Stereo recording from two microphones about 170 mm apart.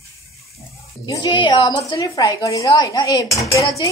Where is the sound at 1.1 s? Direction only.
25° left (ahead or behind).